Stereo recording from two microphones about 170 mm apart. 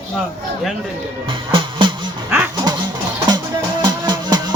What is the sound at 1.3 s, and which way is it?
Music, 30° right (ahead or behind).